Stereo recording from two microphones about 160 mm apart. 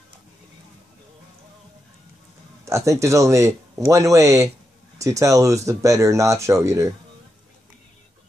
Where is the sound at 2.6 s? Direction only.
20° right (ahead or behind).